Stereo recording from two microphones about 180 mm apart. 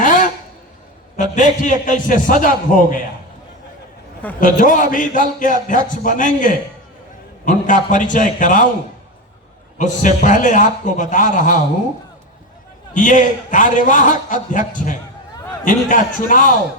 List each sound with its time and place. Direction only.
0.0 s a sound: 45° left (ahead or behind)
1.1 s a man's voice: 45° left (ahead or behind)
4.4 s a man's voice: 50° left (ahead or behind)
9.7 s a man's voice: 45° left (ahead or behind)
12.9 s a man's voice: 45° left (ahead or behind)